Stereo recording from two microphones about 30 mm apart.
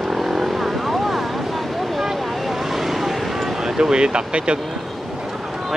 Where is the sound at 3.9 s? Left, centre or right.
Right.